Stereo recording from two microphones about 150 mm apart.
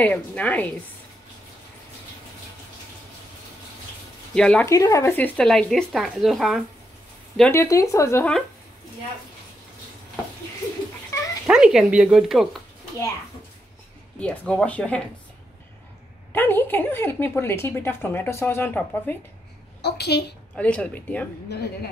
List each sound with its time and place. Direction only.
0.0 s a woman's voice: 10° left (ahead or behind)
4.3 s speech: 5° left (ahead or behind)
4.6 s speech: 20° left (ahead or behind); by 6.6 s centre (ahead or behind)
7.5 s speech: 20° left (ahead or behind)
11.1 s dog: 20° left (ahead or behind)
11.4 s speech: 5° right (ahead or behind)
14.2 s a woman's voice: 10° left (ahead or behind)
16.3 s a woman's voice: 15° left (ahead or behind)
19.8 s a woman's voice: 90° left
20.5 s a woman's voice: 10° left (ahead or behind)